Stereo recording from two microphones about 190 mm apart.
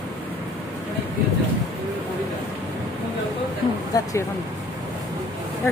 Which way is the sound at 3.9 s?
15° left (ahead or behind).